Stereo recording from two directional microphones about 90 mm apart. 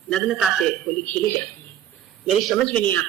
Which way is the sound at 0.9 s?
30° left (ahead or behind).